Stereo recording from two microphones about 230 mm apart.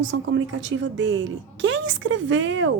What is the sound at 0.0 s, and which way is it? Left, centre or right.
A woman's voice, right.